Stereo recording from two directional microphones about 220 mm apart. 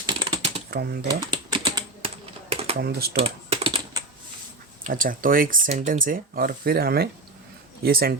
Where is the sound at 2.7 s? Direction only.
45° right (ahead or behind).